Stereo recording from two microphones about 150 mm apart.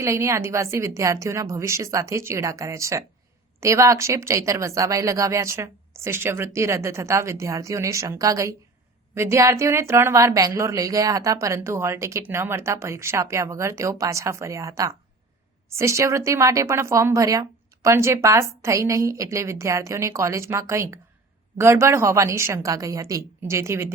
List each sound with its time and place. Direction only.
0.0 s speech: 20° right (ahead or behind)